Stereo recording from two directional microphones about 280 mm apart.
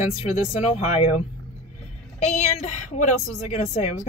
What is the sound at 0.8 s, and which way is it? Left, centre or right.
Speech, left.